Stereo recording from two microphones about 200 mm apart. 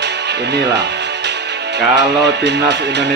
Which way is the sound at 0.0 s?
60° right (ahead or behind).